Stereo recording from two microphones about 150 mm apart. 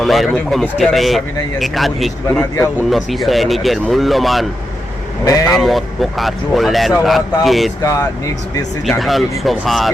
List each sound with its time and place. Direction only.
0.0 s speech: centre (ahead or behind)
5.2 s speech: 25° left (ahead or behind)
5.5 s speech: centre (ahead or behind)
7.8 s speech: 20° left (ahead or behind)
8.9 s speech: centre (ahead or behind)